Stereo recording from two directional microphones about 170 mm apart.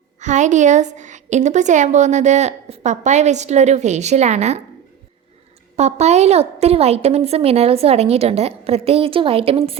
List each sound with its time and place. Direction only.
0.2 s a woman's voice: 45° right (ahead or behind)
5.7 s a woman's voice: 40° right (ahead or behind)